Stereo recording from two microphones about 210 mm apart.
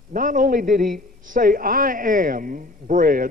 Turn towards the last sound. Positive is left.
turn(degrees=-40)  # may be behind; listen again after turning